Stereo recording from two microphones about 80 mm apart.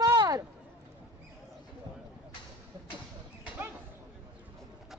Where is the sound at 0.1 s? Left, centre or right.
Right.